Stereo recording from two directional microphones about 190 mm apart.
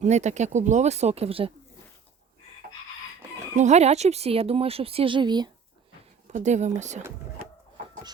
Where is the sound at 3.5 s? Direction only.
35° right (ahead or behind).